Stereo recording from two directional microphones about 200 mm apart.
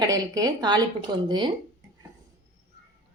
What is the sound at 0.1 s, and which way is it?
A woman's voice, 20° right (ahead or behind).